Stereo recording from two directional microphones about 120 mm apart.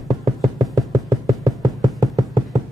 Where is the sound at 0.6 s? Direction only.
Centre (ahead or behind).